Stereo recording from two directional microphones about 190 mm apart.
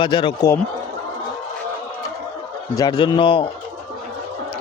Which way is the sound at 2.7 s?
25° left (ahead or behind).